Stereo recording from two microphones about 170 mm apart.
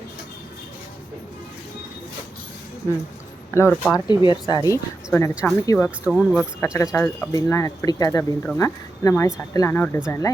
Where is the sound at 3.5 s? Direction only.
15° left (ahead or behind).